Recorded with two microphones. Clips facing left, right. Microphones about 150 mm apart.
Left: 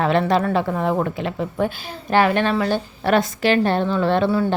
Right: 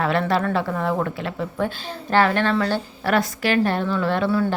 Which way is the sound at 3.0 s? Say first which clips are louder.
Left 4 dB; 25° left (ahead or behind).